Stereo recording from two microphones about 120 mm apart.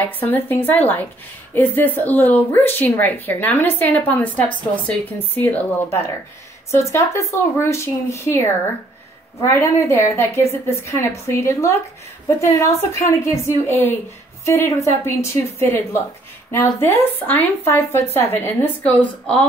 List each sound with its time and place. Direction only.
0.0 s speech: 15° left (ahead or behind)